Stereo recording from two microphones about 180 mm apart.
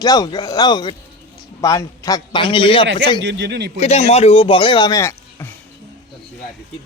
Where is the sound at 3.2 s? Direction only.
80° right.